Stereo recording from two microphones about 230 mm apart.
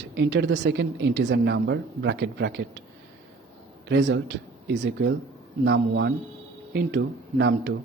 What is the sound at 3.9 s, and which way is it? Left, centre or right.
Speech, right.